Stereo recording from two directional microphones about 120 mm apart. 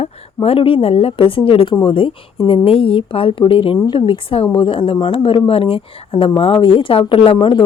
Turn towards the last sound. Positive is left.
turn(degrees=45)  # may be behind; listen again after turning